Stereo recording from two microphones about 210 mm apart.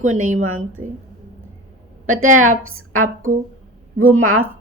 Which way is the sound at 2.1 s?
80° right.